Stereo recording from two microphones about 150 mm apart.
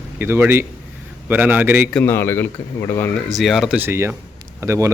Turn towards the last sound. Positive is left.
turn(degrees=-20)  # may be behind; listen again after turning